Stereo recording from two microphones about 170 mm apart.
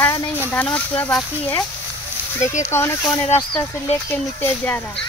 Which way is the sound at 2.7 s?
15° left (ahead or behind).